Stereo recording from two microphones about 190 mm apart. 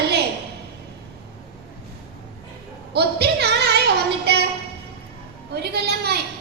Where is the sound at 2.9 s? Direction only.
60° right (ahead or behind).